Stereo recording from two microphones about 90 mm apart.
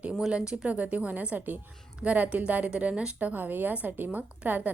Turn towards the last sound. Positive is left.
turn(degrees=-20)  # may be behind; listen again after turning